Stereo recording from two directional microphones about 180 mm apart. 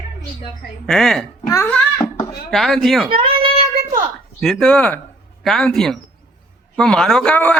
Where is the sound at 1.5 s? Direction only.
15° left (ahead or behind).